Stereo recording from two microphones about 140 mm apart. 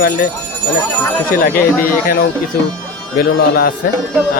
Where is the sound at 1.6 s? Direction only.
90° left.